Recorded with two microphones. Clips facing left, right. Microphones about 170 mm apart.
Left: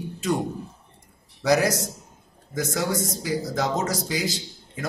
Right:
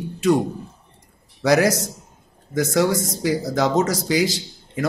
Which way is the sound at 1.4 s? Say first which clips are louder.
Right 4 dB; 90° right.